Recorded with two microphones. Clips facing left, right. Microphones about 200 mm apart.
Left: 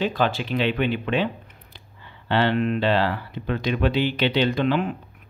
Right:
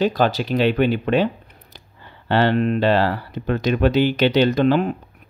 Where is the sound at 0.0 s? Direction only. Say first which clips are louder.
Right 4 dB; 40° right (ahead or behind).